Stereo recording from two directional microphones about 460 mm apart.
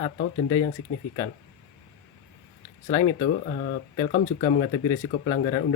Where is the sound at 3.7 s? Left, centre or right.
Centre.